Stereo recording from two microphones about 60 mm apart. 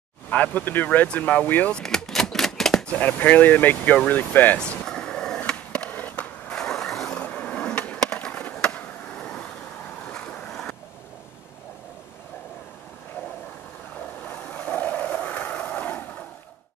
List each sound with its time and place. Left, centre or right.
0.3 s speech: left
1.8 s typewriter: centre
2.9 s speech: left
4.6 s a sound: centre
5.9 s a sound: left
6.5 s vehicle: centre
7.1 s skateboard: left
10.0 s vehicle: centre
10.5 s vehicle: centre
14.2 s vehicle: left